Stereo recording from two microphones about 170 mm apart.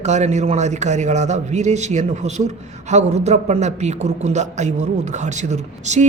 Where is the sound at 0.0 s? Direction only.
40° right (ahead or behind).